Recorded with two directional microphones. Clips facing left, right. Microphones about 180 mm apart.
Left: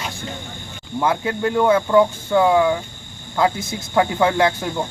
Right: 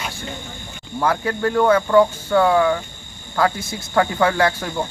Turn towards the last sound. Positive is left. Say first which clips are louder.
# left 1 dB
turn(degrees=15)  # may be behind; listen again after turning